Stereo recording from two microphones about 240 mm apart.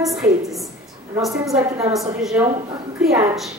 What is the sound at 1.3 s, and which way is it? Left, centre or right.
A woman's voice, centre.